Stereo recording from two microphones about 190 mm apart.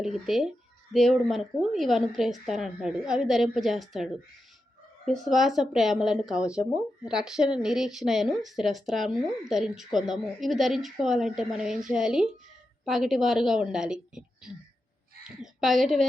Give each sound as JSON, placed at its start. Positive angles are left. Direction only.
{"t": 0.0, "sound": "a woman's voice", "side_deg": 0}